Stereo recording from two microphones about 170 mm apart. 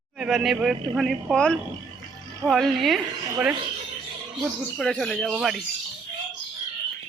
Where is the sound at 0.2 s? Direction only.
Centre (ahead or behind).